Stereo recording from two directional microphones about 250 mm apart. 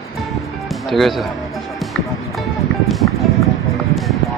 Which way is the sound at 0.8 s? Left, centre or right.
Centre.